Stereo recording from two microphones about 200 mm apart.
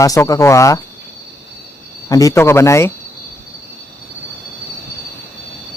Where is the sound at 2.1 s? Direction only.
15° left (ahead or behind).